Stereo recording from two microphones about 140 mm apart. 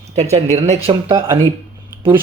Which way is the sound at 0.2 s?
50° right (ahead or behind).